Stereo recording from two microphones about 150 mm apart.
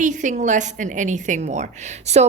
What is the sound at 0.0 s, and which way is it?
A woman's voice, 55° right (ahead or behind).